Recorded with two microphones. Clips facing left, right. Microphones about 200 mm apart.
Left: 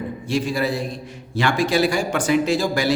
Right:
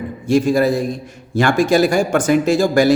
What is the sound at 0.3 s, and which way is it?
A man's voice, 45° right (ahead or behind).